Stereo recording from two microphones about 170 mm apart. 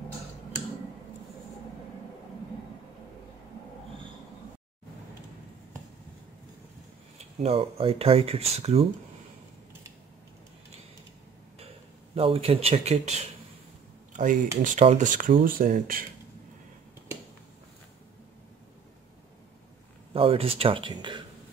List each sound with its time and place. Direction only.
7.3 s speech: 35° right (ahead or behind)
12.2 s speech: 35° right (ahead or behind); by 16.1 s 55° right (ahead or behind)
20.2 s speech: 35° right (ahead or behind)